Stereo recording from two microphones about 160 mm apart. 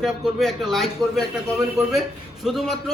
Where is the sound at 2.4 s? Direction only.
Centre (ahead or behind).